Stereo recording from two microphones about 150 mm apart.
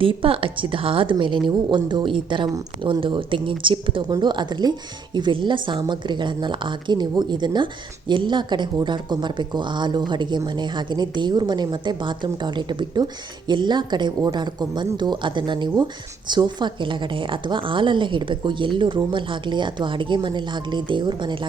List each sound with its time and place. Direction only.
0.0 s a woman's voice: 35° right (ahead or behind)